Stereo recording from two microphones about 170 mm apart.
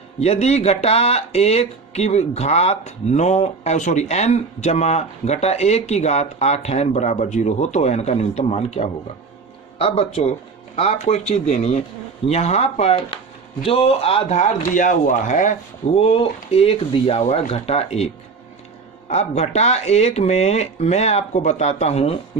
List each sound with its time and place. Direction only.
0.2 s speech: 40° left (ahead or behind)
16.0 s speech: 35° left (ahead or behind)